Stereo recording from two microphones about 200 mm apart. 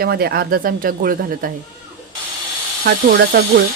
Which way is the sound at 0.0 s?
50° right (ahead or behind).